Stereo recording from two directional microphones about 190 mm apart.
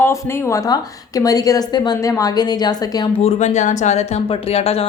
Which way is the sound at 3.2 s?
35° left (ahead or behind).